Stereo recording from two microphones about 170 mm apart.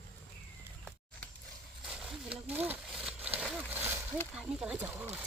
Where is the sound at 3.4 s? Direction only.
5° left (ahead or behind).